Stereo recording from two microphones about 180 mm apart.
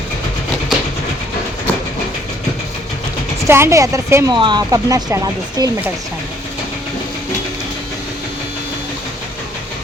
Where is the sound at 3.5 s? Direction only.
15° right (ahead or behind).